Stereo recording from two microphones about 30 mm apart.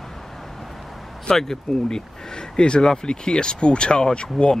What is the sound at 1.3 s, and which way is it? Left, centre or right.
Speech, centre.